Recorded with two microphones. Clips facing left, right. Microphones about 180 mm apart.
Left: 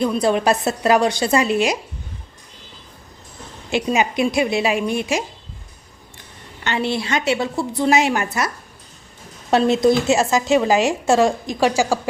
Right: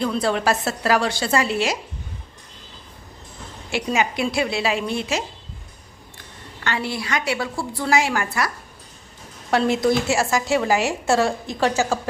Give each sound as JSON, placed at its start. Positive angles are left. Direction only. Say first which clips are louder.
{"t": 0.0, "sound": "a woman's voice", "louder": "left 4 dB", "side_deg": 15}
{"t": 3.7, "sound": "a woman's voice", "louder": "left 3 dB", "side_deg": 20}
{"t": 6.7, "sound": "a woman's voice", "louder": "left 4 dB", "side_deg": 25}
{"t": 9.5, "sound": "a woman's voice", "louder": "left 4 dB", "side_deg": 25}